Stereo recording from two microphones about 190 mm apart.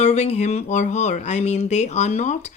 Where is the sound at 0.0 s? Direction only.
35° left (ahead or behind).